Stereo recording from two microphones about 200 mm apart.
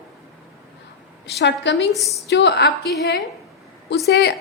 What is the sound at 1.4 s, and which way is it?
A woman's voice, 60° left (ahead or behind).